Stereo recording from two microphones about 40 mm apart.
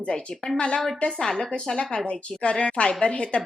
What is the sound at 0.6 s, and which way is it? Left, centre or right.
A woman's voice, left.